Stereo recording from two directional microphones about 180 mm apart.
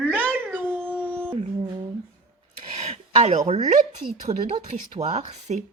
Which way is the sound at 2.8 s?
35° right (ahead or behind).